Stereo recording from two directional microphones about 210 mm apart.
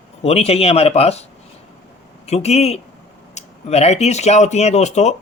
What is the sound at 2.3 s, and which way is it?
Speech, 30° left (ahead or behind).